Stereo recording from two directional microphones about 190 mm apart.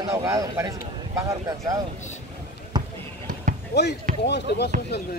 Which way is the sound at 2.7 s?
25° right (ahead or behind).